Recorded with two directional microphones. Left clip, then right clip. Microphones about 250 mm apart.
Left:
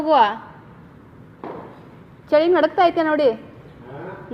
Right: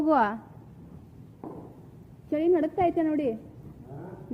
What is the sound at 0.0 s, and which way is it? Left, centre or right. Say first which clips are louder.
Speech: left 8 dB; right.